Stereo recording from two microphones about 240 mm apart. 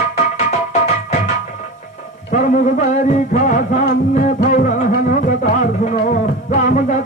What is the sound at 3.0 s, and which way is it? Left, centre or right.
Music, left.